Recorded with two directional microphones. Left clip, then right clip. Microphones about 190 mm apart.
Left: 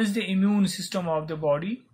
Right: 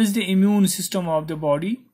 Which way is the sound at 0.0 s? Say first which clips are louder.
Right 5 dB; 25° right (ahead or behind).